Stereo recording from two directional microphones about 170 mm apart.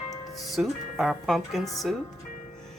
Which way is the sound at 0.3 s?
Centre (ahead or behind).